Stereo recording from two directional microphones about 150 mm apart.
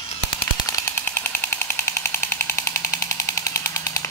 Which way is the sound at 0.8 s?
20° left (ahead or behind).